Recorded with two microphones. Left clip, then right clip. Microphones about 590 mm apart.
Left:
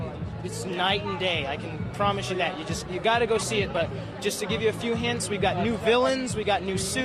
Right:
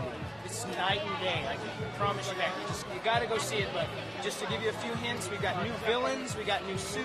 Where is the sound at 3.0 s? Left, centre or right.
Left.